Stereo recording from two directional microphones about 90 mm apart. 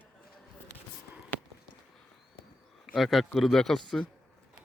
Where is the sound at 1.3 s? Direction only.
20° left (ahead or behind).